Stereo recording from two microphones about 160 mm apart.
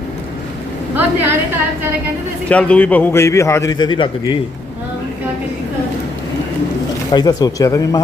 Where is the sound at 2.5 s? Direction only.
10° left (ahead or behind); by 4.4 s 30° left (ahead or behind).